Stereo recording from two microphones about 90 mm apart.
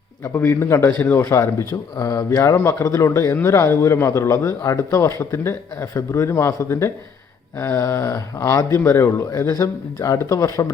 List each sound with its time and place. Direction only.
0.4 s a man's voice: 30° left (ahead or behind)
8.7 s speech: 30° left (ahead or behind)
9.5 s a man's voice: 40° left (ahead or behind)